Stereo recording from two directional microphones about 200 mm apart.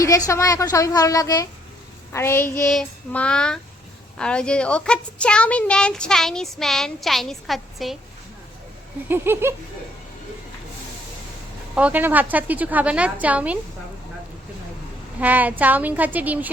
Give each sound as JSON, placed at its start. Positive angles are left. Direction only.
{"t": 0.3, "sound": "child singing", "side_deg": 15}
{"t": 4.2, "sound": "a woman's voice", "side_deg": 5}
{"t": 9.0, "sound": "a woman's voice", "side_deg": -10}
{"t": 11.7, "sound": "a woman's voice", "side_deg": -5}
{"t": 15.2, "sound": "a woman's voice", "side_deg": -10}